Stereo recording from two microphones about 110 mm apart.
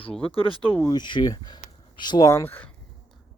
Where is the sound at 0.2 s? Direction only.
55° left (ahead or behind).